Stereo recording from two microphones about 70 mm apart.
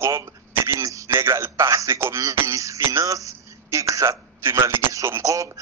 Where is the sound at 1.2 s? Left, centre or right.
Right.